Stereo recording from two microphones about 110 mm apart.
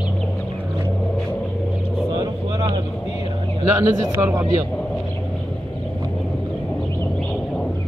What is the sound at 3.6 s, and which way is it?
Speech, 25° right (ahead or behind).